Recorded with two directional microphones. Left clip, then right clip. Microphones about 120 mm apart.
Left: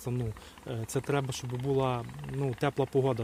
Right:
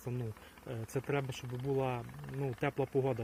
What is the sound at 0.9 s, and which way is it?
Speech, 25° left (ahead or behind).